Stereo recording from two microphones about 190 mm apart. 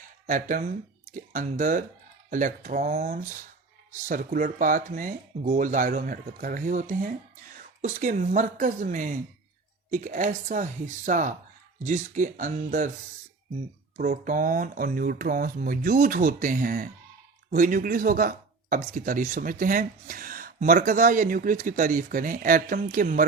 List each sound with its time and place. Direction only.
0.3 s speech: 45° right (ahead or behind)
13.9 s speech: 45° right (ahead or behind)